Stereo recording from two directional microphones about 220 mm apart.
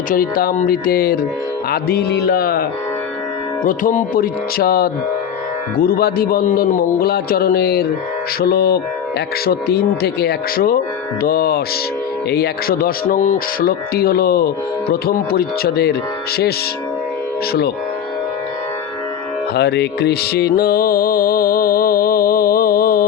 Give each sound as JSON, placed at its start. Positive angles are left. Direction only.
{"t": 0.1, "sound": "speech", "side_deg": 40}
{"t": 3.6, "sound": "music", "side_deg": 40}
{"t": 5.8, "sound": "speech", "side_deg": 45}
{"t": 19.5, "sound": "music", "side_deg": 50}